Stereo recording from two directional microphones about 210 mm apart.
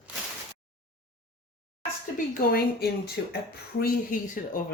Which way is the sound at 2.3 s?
45° left (ahead or behind).